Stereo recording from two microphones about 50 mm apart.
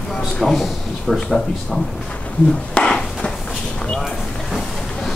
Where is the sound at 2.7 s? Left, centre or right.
Centre.